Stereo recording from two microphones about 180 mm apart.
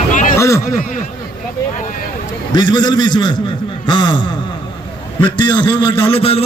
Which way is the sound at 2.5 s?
25° left (ahead or behind).